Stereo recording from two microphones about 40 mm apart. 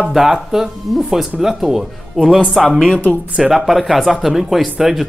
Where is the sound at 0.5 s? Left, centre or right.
Centre.